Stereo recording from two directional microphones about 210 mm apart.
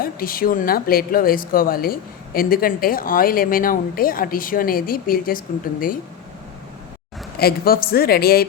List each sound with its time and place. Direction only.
0.0 s speech: 45° left (ahead or behind)
7.3 s speech: 45° left (ahead or behind)